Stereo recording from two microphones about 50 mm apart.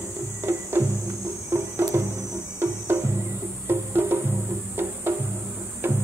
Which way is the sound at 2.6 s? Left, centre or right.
Right.